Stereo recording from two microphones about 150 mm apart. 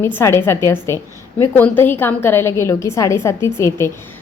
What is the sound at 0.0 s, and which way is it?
A woman's voice, 15° left (ahead or behind).